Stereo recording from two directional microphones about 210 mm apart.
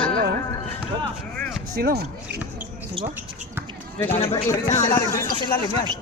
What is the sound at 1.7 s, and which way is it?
Speech, 45° right (ahead or behind).